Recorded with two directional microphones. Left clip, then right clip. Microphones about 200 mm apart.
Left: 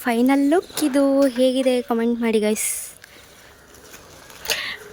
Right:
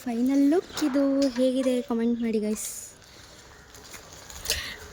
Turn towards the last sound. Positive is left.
turn(degrees=0)  # may be behind; listen again after turning